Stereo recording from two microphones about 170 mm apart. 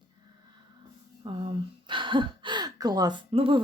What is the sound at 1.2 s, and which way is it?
Speech, 35° right (ahead or behind).